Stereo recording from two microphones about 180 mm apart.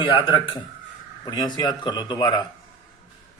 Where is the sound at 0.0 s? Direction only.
25° left (ahead or behind).